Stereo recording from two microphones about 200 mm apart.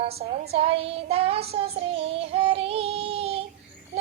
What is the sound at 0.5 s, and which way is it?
Child singing, 30° right (ahead or behind).